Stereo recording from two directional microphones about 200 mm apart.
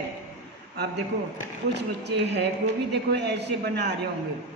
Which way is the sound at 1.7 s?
60° right (ahead or behind).